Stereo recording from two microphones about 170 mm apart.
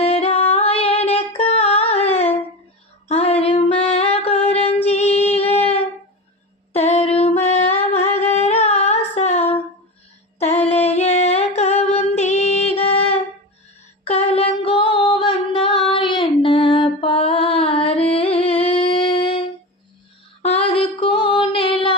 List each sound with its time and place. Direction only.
0.0 s singing: 35° left (ahead or behind)
0.9 s music: 35° left (ahead or behind)
3.1 s female singing: 35° left (ahead or behind)
3.5 s music: 35° left (ahead or behind)
4.9 s female singing: 40° left (ahead or behind)
6.7 s a sound: 40° left (ahead or behind)
7.2 s music: 35° left (ahead or behind)
8.8 s a sound: 40° left (ahead or behind)
14.0 s music: 35° left (ahead or behind)
18.6 s humming: 30° left (ahead or behind)
20.7 s music: 30° left (ahead or behind)